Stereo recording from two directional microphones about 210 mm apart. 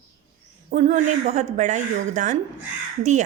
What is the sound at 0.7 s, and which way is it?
Speech, 35° right (ahead or behind).